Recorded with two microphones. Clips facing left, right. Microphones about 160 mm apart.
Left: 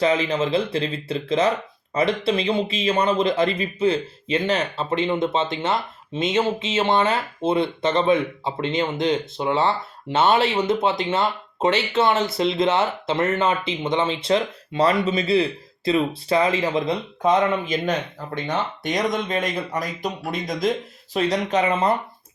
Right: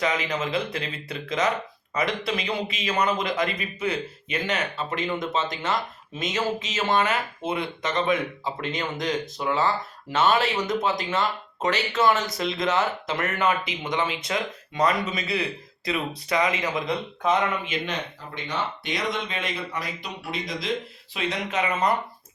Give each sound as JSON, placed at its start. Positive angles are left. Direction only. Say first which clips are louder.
{"t": 0.0, "sound": "speech", "louder": "left 6 dB", "side_deg": 30}
{"t": 18.4, "sound": "speech", "louder": "left 4 dB", "side_deg": 45}